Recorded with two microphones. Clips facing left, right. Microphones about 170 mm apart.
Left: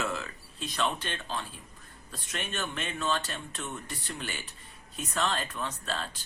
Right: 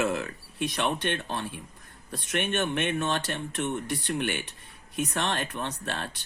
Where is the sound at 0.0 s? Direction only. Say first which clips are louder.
Right 6 dB; 60° right (ahead or behind).